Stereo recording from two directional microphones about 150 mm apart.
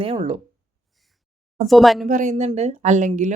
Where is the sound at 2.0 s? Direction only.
55° right (ahead or behind).